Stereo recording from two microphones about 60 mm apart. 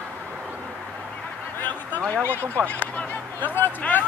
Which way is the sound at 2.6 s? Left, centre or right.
Left.